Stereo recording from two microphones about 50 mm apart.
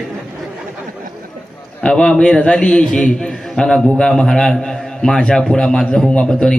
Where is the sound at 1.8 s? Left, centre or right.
Centre.